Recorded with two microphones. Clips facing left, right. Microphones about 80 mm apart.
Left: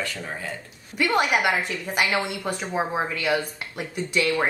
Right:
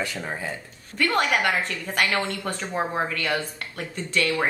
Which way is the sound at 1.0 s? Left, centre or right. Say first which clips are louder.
Left 1 dB; centre.